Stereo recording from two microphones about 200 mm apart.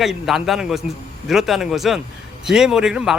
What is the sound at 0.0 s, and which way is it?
Speech, centre (ahead or behind).